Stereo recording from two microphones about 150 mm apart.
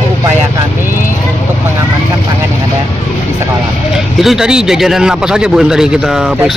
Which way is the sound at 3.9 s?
Centre (ahead or behind).